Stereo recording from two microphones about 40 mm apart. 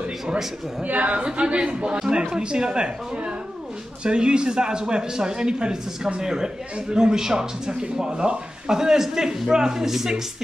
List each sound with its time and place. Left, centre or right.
0.8 s a woman's voice: right
1.2 s a man's voice: right; by 10.2 s centre